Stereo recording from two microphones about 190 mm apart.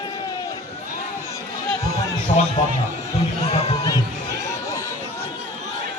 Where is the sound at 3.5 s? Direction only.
35° left (ahead or behind).